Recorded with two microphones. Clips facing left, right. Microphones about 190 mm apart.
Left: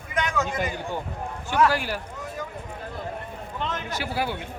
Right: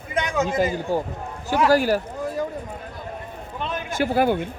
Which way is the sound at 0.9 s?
35° right (ahead or behind).